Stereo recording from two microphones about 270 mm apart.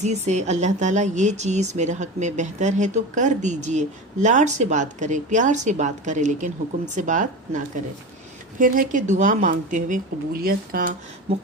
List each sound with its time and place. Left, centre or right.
0.0 s speech: right